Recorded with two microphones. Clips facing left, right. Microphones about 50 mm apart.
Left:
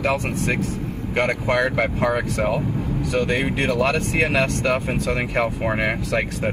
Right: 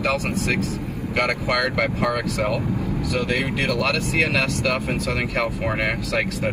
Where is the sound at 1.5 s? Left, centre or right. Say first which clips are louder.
Left 2 dB; left.